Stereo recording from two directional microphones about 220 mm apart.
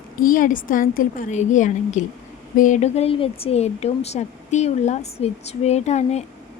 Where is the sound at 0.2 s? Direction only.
40° left (ahead or behind).